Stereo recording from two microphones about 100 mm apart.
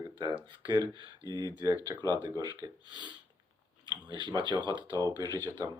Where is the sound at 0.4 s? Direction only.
45° right (ahead or behind).